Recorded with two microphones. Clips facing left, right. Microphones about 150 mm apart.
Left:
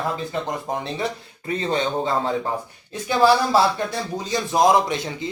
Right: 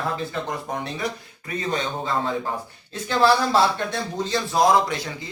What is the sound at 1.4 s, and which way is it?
Speech, 25° left (ahead or behind).